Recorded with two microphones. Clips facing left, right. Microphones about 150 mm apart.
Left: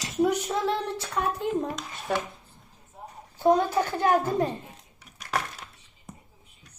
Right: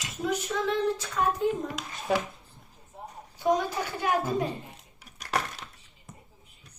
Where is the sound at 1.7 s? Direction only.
Centre (ahead or behind).